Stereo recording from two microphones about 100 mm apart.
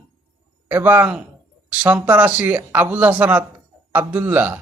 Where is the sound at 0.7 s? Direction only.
20° right (ahead or behind).